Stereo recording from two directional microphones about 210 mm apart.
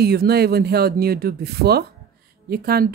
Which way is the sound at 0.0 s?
50° right (ahead or behind).